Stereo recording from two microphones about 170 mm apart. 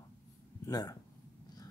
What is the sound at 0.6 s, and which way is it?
Speech, 20° left (ahead or behind).